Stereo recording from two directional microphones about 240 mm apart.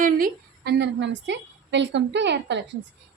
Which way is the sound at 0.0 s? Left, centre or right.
Right.